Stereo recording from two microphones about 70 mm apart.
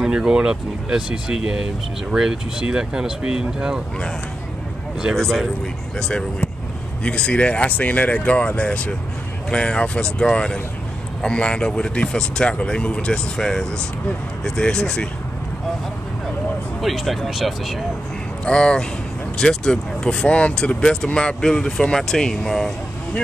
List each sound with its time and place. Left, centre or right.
0.0 s speech: centre
5.9 s speech: centre
16.8 s speech: centre
18.4 s speech: centre